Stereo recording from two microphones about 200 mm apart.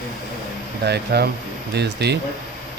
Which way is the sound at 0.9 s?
55° right (ahead or behind).